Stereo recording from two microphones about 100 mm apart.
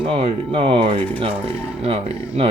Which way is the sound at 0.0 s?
70° right (ahead or behind).